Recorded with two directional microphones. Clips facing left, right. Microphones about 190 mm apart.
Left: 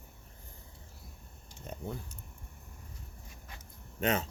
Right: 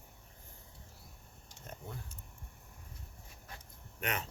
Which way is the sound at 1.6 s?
20° left (ahead or behind).